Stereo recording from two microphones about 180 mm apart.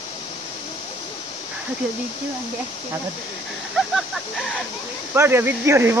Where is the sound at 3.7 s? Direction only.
Centre (ahead or behind).